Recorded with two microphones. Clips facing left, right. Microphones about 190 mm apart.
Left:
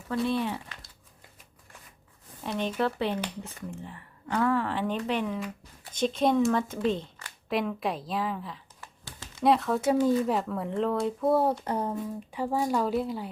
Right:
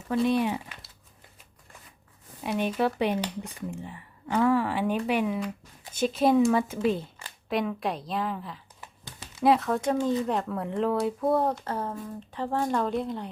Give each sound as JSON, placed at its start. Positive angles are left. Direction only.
{"t": 0.1, "sound": "speech", "side_deg": -15}
{"t": 2.4, "sound": "speech", "side_deg": -10}
{"t": 8.8, "sound": "a sound", "side_deg": -15}
{"t": 9.4, "sound": "speech", "side_deg": 0}
{"t": 11.5, "sound": "a woman's voice", "side_deg": 15}